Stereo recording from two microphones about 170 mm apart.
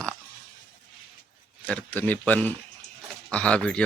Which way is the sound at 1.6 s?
10° left (ahead or behind).